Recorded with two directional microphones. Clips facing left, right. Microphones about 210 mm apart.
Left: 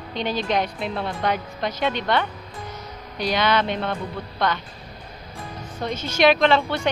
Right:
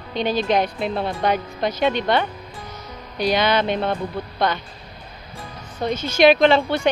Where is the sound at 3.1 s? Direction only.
10° right (ahead or behind).